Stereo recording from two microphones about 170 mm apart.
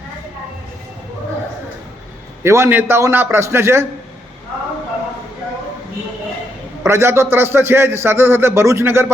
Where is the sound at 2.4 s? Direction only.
15° right (ahead or behind).